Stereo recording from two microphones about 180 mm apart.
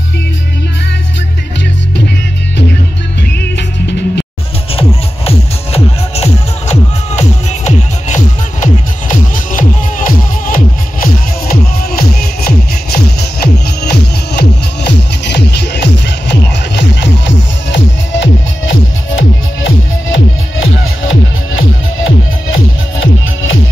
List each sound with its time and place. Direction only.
3.5 s music: 75° left (ahead or behind)
4.7 s music: 35° left (ahead or behind); by 17.1 s 75° left (ahead or behind)
17.6 s music: 85° left